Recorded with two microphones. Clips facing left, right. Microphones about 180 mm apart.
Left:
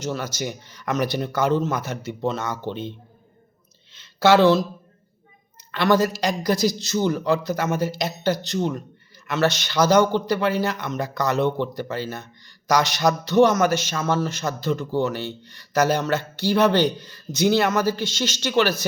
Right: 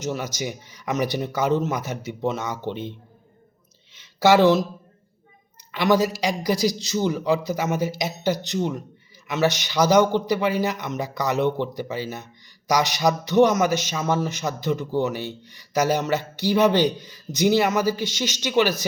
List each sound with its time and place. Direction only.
0.1 s a man's voice: 15° right (ahead or behind)
3.9 s a sound: 15° right (ahead or behind)
5.7 s a man's voice: 15° right (ahead or behind)